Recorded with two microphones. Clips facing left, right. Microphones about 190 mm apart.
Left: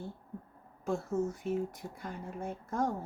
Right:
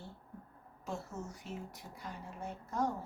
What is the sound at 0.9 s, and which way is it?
A woman's voice, 50° left (ahead or behind).